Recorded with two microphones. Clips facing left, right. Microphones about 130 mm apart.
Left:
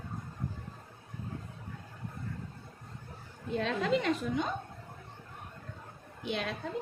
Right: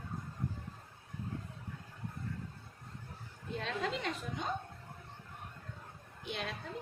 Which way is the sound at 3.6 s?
85° left.